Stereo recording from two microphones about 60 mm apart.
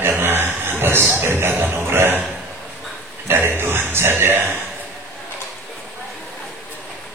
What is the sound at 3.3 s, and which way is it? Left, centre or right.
Speech, right.